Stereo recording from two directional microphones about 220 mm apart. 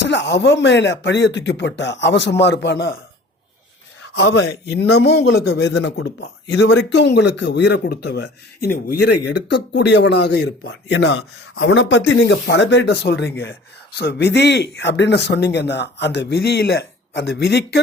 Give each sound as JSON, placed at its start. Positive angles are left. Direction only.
{"t": 0.0, "sound": "speech", "side_deg": 50}
{"t": 4.3, "sound": "speech", "side_deg": 50}